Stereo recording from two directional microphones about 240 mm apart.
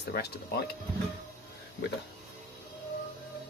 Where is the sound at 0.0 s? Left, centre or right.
Left.